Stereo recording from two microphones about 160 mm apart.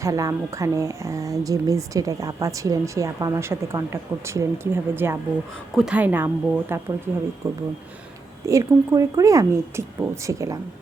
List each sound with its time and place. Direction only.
0.0 s a woman's voice: 20° right (ahead or behind)